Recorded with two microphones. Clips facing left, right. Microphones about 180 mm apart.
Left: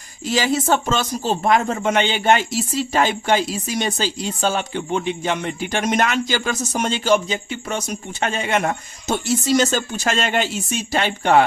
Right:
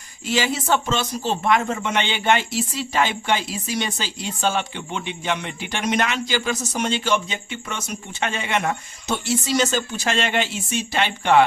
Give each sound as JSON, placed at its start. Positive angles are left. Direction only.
{"t": 0.3, "sound": "speech", "side_deg": 40}